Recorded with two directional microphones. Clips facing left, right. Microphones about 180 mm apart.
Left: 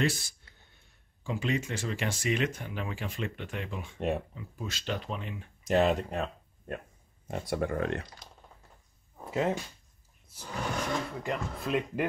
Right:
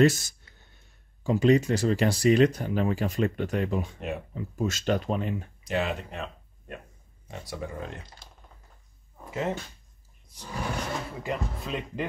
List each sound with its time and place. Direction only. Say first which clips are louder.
0.0 s speech: right 9 dB; 45° right (ahead or behind)
5.6 s speech: left 6 dB; 40° left (ahead or behind)
7.2 s speech: left 6 dB; 55° left (ahead or behind)
10.5 s speech: even; 5° right (ahead or behind)